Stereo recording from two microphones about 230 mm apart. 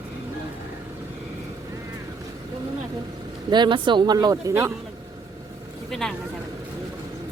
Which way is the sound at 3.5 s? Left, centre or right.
Centre.